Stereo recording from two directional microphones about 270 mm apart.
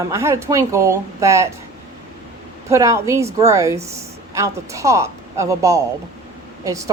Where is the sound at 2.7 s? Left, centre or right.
Centre.